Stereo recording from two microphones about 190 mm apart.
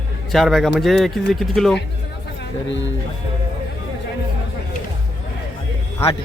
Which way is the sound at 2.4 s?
75° left (ahead or behind).